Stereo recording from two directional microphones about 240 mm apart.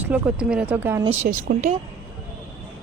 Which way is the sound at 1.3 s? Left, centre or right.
Right.